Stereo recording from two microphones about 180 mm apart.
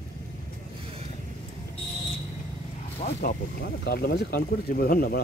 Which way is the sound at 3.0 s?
55° left (ahead or behind).